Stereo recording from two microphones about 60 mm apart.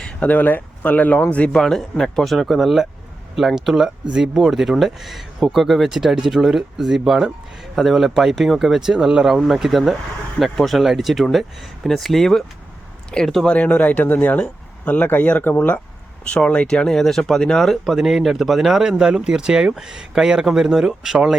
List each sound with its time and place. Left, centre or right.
0.0 s speech: centre
1.5 s speech: centre
13.4 s speech: left; by 21.3 s centre